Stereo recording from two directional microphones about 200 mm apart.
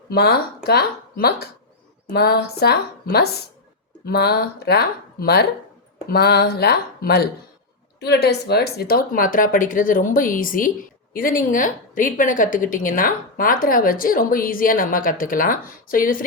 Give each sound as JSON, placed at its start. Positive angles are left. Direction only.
{"t": 0.1, "sound": "a woman's voice", "side_deg": 50}